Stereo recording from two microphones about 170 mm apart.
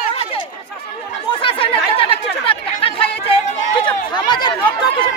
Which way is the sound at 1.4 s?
30° left (ahead or behind).